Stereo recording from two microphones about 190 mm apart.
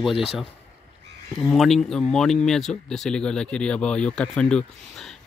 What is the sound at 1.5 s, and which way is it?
Speech, centre (ahead or behind).